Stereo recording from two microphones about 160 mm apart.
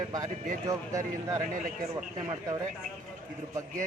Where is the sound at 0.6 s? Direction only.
20° right (ahead or behind).